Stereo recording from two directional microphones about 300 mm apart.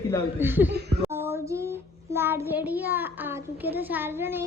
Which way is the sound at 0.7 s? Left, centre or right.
Right.